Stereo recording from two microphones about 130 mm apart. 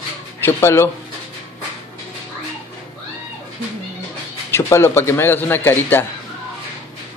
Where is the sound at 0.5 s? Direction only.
20° left (ahead or behind).